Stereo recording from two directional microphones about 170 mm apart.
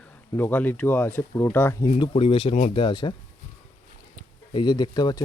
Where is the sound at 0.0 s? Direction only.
10° left (ahead or behind).